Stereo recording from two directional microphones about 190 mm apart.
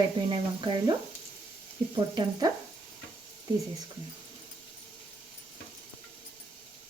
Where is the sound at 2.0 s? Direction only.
25° right (ahead or behind).